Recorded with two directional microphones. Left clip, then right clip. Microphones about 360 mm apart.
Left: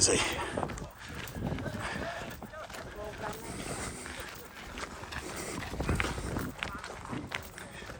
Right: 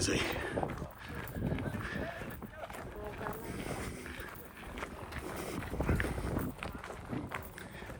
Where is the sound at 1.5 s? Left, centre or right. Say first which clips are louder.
Left 3 dB; centre.